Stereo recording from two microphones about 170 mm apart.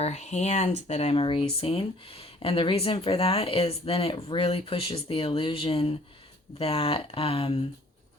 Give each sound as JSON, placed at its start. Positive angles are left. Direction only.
{"t": 0.0, "sound": "speech", "side_deg": 40}